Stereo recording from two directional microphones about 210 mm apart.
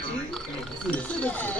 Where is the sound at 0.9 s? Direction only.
5° left (ahead or behind).